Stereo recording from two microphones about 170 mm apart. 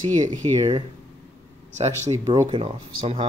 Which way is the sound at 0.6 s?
30° right (ahead or behind).